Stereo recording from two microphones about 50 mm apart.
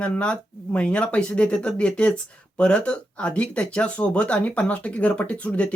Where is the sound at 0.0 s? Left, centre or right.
Left.